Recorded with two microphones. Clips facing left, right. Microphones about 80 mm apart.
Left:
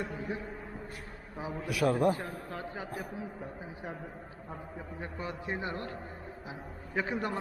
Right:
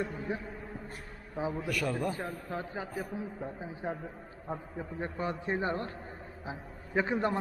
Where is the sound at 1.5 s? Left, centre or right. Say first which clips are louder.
Right 2 dB; centre.